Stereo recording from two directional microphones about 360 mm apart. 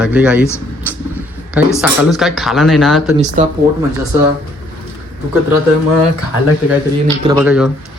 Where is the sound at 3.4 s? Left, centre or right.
Right.